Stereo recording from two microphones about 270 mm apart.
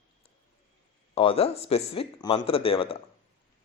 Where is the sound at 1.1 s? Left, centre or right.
Left.